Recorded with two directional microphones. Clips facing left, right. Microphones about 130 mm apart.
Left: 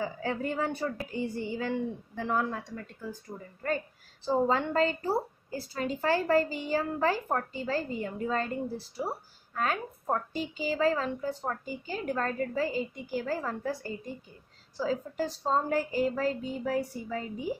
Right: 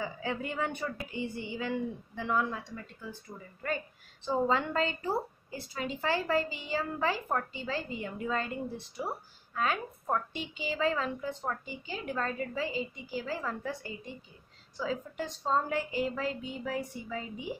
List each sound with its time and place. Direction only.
0.0 s a woman's voice: 40° left (ahead or behind)
9.5 s a woman's voice: 45° left (ahead or behind)